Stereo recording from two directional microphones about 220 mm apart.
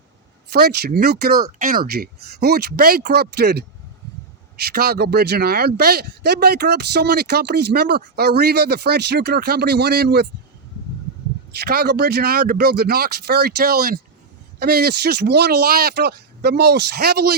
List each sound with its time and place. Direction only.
0.5 s speech: 45° right (ahead or behind)
4.7 s speech: 45° right (ahead or behind)
11.5 s speech: 45° right (ahead or behind)